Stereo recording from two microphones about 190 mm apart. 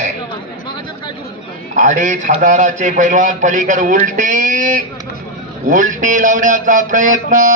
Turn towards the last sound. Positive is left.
turn(degrees=-45)  # may be behind; listen again after turning